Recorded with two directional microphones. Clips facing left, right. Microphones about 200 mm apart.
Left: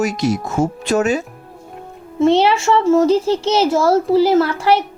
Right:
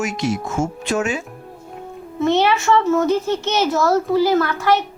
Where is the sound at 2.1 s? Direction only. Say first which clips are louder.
Left 4 dB; 30° left (ahead or behind).